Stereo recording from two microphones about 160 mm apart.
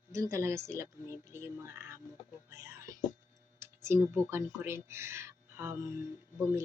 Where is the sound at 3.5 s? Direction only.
15° right (ahead or behind).